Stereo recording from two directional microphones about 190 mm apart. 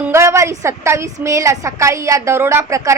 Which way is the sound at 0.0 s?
15° right (ahead or behind).